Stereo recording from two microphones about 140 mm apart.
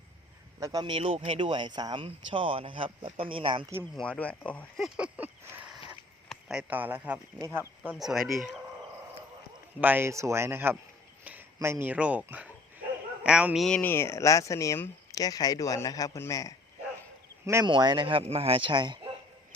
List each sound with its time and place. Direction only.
0.6 s speech: 30° right (ahead or behind)
3.9 s speech: 10° left (ahead or behind)
4.8 s a sound: 10° right (ahead or behind)
7.9 s speech: centre (ahead or behind)
9.8 s speech: 15° right (ahead or behind)
13.7 s speech: 10° left (ahead or behind)
17.4 s speech: 20° right (ahead or behind)
17.7 s speech: 35° right (ahead or behind)